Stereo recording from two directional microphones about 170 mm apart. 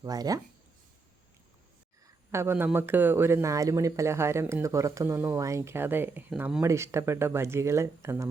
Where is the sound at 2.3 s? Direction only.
15° right (ahead or behind).